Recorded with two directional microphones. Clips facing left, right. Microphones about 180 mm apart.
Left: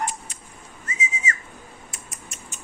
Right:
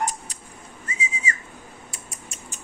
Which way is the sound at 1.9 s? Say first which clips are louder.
Right 1 dB; 30° right (ahead or behind).